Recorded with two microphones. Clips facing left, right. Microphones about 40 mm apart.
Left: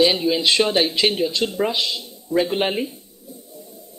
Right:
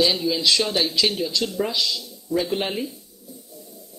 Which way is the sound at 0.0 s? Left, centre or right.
Left.